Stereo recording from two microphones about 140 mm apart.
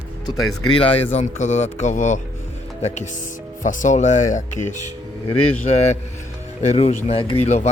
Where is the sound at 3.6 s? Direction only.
65° left (ahead or behind).